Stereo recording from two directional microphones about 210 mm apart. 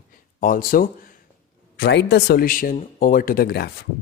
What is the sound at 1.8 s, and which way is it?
Speech, 55° left (ahead or behind).